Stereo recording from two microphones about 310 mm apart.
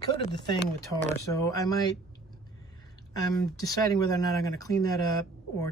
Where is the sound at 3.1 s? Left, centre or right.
Centre.